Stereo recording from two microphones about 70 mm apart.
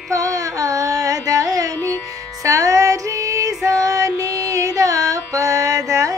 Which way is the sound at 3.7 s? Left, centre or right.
Right.